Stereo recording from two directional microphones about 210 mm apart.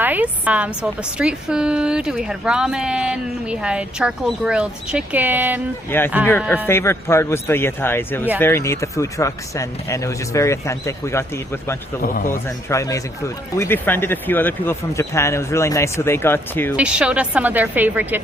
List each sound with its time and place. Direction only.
0.0 s a woman's voice: 10° right (ahead or behind)
6.7 s speech: 10° left (ahead or behind)
12.0 s a man's voice: 40° left (ahead or behind)
12.3 s speech: 15° left (ahead or behind)
16.7 s speech: 5° right (ahead or behind)